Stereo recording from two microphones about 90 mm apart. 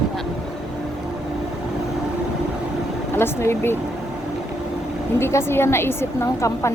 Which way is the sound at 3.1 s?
25° left (ahead or behind).